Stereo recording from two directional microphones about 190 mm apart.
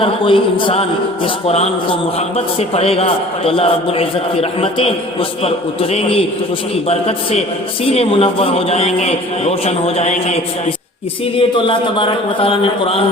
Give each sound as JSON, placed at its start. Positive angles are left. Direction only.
{"t": 0.0, "sound": "a man's voice", "side_deg": 25}